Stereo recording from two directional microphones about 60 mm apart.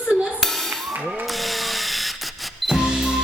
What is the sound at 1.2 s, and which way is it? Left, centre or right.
Drill, centre.